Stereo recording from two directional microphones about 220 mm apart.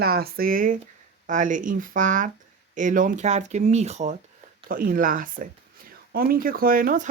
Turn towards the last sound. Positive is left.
turn(degrees=-40)  # may be behind; listen again after turning